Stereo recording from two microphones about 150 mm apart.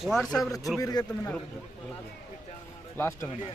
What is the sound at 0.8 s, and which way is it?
Speech, 25° left (ahead or behind).